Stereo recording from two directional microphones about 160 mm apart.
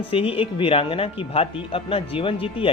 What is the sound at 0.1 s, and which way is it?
Speech, 35° left (ahead or behind).